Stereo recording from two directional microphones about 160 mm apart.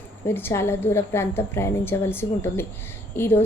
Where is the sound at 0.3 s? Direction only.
15° left (ahead or behind).